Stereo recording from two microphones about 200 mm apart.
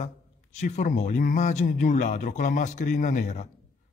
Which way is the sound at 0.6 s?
35° left (ahead or behind).